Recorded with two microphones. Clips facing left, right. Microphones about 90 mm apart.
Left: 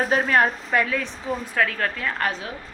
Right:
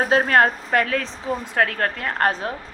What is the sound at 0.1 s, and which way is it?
A woman's voice, 60° right (ahead or behind).